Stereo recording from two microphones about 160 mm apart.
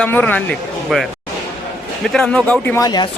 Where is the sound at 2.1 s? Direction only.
5° left (ahead or behind).